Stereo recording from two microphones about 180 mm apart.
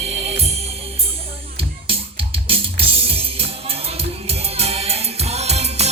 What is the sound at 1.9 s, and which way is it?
Music, 30° right (ahead or behind).